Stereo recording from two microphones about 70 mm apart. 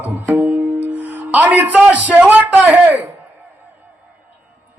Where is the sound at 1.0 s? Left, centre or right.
Right.